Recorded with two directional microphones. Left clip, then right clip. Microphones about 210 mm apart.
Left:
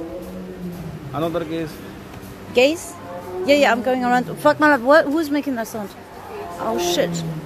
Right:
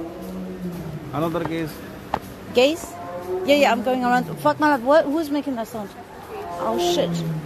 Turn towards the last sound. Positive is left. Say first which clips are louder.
# left 1 dB
turn(degrees=10)  # may be behind; listen again after turning